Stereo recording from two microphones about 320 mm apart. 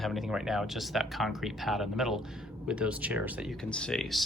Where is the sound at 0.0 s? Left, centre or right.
Centre.